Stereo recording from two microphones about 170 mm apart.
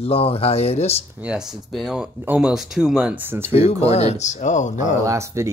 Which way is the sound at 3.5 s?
35° left (ahead or behind).